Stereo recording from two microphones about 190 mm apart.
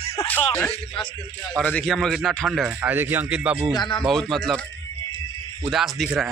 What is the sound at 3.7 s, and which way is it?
Speech, 25° left (ahead or behind).